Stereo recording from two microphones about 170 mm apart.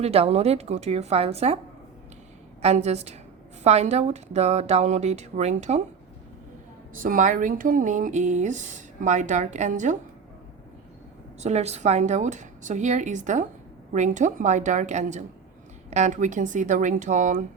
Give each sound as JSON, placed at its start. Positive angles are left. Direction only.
{"t": 0.0, "sound": "speech", "side_deg": -35}
{"t": 2.6, "sound": "speech", "side_deg": -40}
{"t": 6.9, "sound": "speech", "side_deg": -55}
{"t": 11.3, "sound": "speech", "side_deg": -40}